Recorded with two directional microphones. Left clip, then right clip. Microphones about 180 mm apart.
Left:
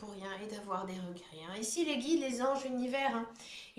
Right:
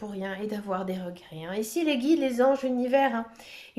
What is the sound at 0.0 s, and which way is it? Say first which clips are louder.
Speech: right 10 dB; 45° right (ahead or behind).